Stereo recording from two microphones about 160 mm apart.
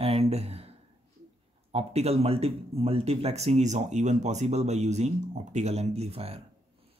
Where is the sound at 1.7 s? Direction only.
40° right (ahead or behind).